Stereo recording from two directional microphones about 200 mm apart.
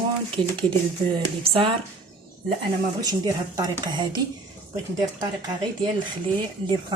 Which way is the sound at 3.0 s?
20° right (ahead or behind).